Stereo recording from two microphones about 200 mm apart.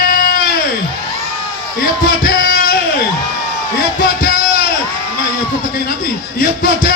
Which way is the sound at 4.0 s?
45° left (ahead or behind).